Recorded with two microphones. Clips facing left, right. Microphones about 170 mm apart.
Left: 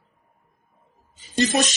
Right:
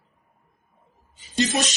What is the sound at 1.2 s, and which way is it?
Speech, 40° left (ahead or behind).